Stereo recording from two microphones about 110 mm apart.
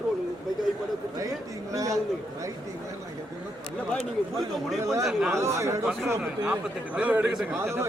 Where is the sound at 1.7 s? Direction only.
30° right (ahead or behind).